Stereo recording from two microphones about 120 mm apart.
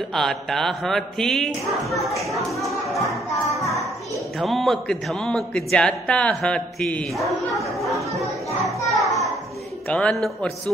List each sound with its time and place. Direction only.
0.1 s speech: centre (ahead or behind)
2.6 s music: centre (ahead or behind)
3.5 s child singing: centre (ahead or behind)
4.4 s speech: centre (ahead or behind)
8.8 s children playing: centre (ahead or behind)
9.8 s a man's voice: 10° left (ahead or behind)